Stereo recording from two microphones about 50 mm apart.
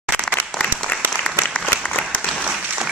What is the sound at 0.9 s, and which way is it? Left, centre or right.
Applause, left.